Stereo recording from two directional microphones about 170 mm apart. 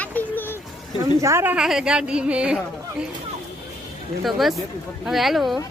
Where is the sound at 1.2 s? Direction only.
15° right (ahead or behind).